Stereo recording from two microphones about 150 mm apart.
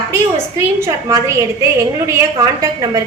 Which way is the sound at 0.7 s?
20° right (ahead or behind).